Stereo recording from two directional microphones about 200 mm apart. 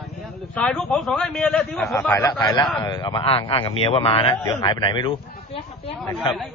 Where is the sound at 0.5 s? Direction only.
5° left (ahead or behind).